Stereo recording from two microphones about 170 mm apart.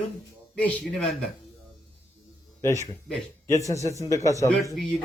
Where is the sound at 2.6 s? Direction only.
15° left (ahead or behind).